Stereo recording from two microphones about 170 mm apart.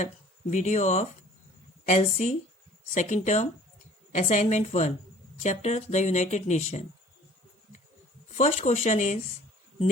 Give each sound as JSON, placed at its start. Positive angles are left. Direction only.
{"t": 0.5, "sound": "speech", "side_deg": 45}
{"t": 8.4, "sound": "speech", "side_deg": 45}